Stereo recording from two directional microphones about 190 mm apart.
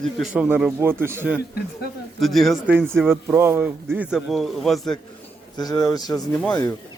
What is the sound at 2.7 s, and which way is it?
Speech, 10° right (ahead or behind).